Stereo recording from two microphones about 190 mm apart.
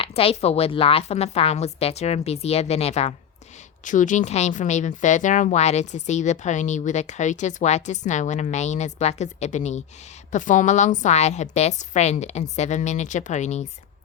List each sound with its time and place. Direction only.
0.0 s speech: 30° left (ahead or behind)